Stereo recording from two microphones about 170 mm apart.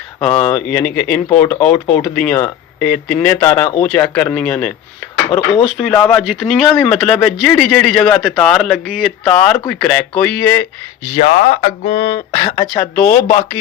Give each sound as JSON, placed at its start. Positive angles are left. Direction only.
{"t": 0.2, "sound": "speech", "side_deg": 5}
{"t": 5.7, "sound": "speech", "side_deg": 0}
{"t": 11.1, "sound": "speech", "side_deg": 40}
{"t": 12.5, "sound": "speech", "side_deg": 15}